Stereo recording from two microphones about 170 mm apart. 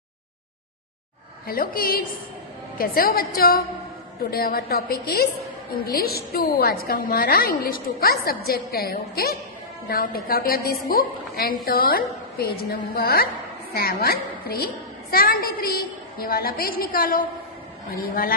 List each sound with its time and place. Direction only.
1.5 s a woman's voice: 60° left (ahead or behind)